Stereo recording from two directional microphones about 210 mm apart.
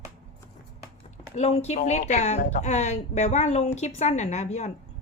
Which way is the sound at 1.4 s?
30° left (ahead or behind).